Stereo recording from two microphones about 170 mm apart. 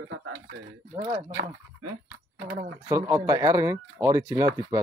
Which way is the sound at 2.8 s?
15° right (ahead or behind).